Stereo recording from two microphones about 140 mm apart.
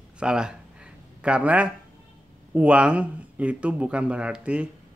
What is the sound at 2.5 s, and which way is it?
Speech, 10° right (ahead or behind).